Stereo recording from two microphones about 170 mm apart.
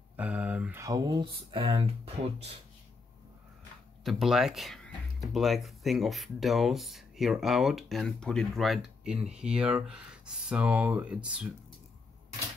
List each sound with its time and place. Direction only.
0.1 s speech: 10° right (ahead or behind); by 1.8 s 30° right (ahead or behind)
4.0 s speech: centre (ahead or behind)